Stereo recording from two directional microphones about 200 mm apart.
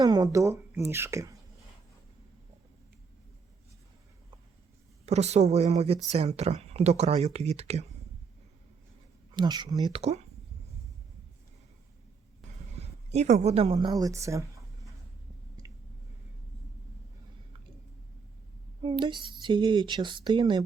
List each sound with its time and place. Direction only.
0.0 s speech: 20° right (ahead or behind)
5.0 s speech: 35° right (ahead or behind)
9.3 s speech: 20° right (ahead or behind)
12.7 s a woman's voice: 35° right (ahead or behind); by 14.4 s 15° right (ahead or behind)
18.8 s speech: 25° right (ahead or behind)